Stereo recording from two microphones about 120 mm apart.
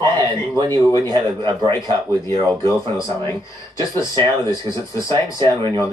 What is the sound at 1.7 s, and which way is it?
Speech, 25° left (ahead or behind).